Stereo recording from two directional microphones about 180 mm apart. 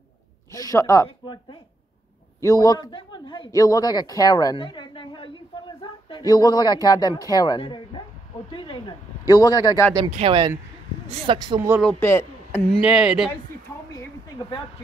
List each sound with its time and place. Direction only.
0.5 s a woman's voice: 20° left (ahead or behind)
10.1 s speech: 30° right (ahead or behind)
11.8 s speech: 10° left (ahead or behind)
12.8 s speech: 5° right (ahead or behind)
13.9 s a sound: 20° left (ahead or behind)